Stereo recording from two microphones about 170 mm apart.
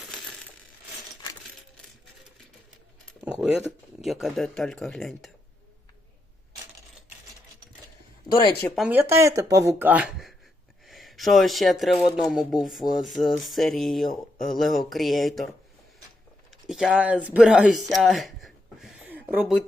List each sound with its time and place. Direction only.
4.0 s speech: centre (ahead or behind)
8.3 s speech: 25° left (ahead or behind)
8.7 s speech: 5° right (ahead or behind)
9.0 s speech: 15° right (ahead or behind); by 15.4 s centre (ahead or behind)
16.5 s speech: centre (ahead or behind)
19.0 s a sound: 10° right (ahead or behind)